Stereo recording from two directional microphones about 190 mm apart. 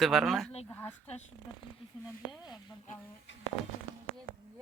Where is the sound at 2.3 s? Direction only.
5° right (ahead or behind).